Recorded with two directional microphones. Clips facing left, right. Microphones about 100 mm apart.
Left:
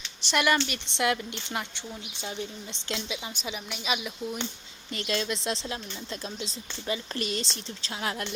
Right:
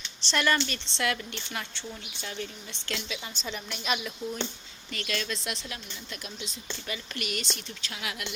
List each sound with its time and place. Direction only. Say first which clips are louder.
0.2 s a woman's voice: left 2 dB; 10° left (ahead or behind)
3.4 s a woman's voice: right 2 dB; 5° left (ahead or behind)
4.9 s speech: left 3 dB; 25° left (ahead or behind)